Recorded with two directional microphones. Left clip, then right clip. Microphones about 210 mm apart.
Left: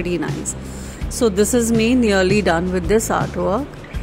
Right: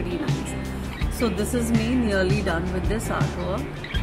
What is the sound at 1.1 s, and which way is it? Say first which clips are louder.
Speech: left 9 dB; 45° left (ahead or behind).